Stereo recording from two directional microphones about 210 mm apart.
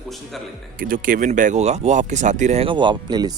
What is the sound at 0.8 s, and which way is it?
Speech, 45° right (ahead or behind).